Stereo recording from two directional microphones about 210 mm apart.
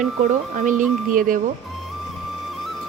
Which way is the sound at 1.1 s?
40° right (ahead or behind).